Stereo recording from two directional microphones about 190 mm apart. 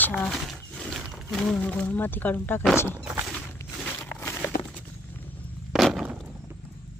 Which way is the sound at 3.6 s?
10° left (ahead or behind).